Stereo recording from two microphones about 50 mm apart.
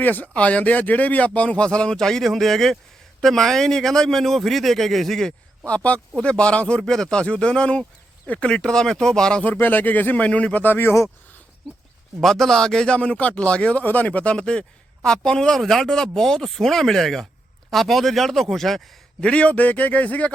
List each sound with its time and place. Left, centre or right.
0.0 s speech: left; by 5.3 s centre
5.6 s a man's voice: left
6.8 s a man's voice: centre
9.4 s speech: left
11.6 s speech: centre
13.0 s a man's voice: left; by 18.8 s centre
19.2 s a man's voice: left